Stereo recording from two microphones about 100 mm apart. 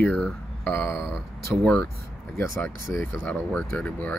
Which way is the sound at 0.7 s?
20° left (ahead or behind).